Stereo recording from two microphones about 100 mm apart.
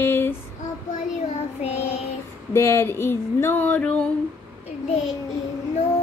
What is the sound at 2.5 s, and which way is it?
Speech, 30° left (ahead or behind).